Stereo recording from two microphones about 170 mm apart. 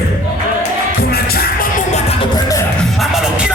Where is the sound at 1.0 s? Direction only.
65° left (ahead or behind).